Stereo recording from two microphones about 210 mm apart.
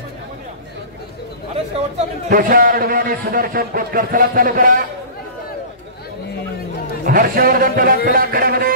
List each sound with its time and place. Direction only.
2.2 s a man's voice: 45° right (ahead or behind)
7.1 s a man's voice: 45° right (ahead or behind)